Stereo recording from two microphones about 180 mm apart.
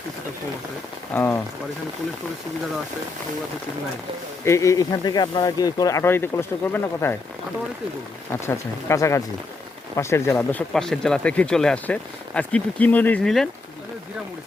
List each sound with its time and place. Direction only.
1.1 s speech: 10° left (ahead or behind)
4.4 s speech: 15° left (ahead or behind)
8.4 s speech: 15° left (ahead or behind)